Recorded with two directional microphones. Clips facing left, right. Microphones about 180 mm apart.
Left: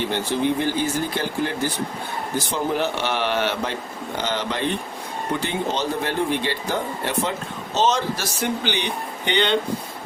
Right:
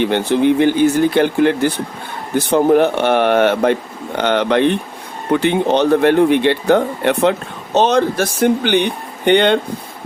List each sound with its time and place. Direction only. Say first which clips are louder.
0.0 s speech: right 8 dB; 65° right (ahead or behind)